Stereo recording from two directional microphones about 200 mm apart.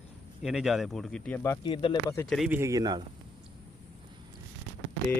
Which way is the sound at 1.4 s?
20° left (ahead or behind).